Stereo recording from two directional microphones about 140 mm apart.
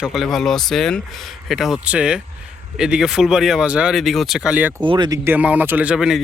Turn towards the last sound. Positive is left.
turn(degrees=-5)  # may be behind; listen again after turning